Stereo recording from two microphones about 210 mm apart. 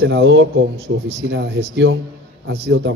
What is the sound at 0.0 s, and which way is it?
A man's voice, 60° right (ahead or behind).